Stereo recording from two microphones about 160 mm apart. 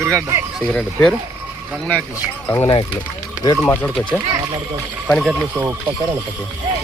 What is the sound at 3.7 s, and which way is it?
Speech, 10° left (ahead or behind).